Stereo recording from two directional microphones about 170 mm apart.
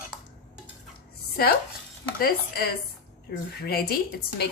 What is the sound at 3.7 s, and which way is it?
Speech, 60° left (ahead or behind).